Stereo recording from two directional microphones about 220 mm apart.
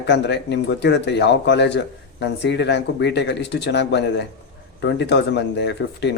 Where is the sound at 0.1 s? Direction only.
50° left (ahead or behind).